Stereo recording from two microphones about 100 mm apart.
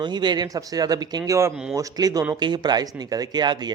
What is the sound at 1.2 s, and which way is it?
Speech, 30° right (ahead or behind).